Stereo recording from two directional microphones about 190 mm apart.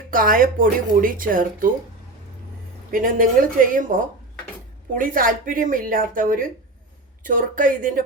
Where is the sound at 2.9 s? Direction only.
45° right (ahead or behind).